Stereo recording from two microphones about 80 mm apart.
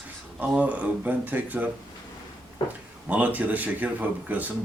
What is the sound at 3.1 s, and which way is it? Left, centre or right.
Speech, centre.